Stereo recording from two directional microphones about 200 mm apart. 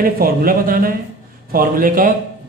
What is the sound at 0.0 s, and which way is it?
A man's voice, 45° right (ahead or behind).